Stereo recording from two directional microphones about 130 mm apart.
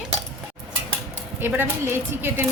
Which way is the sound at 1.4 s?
15° right (ahead or behind).